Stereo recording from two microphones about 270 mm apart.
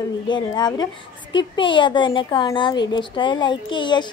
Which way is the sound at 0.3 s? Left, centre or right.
Centre.